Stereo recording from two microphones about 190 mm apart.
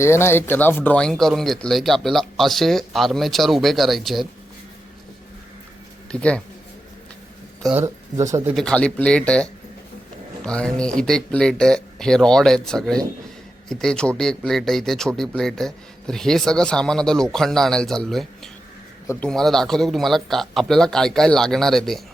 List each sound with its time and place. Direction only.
0.0 s speech: 15° left (ahead or behind)
6.1 s speech: 5° left (ahead or behind)
7.8 s speech: 15° right (ahead or behind)
8.5 s speech: 5° left (ahead or behind)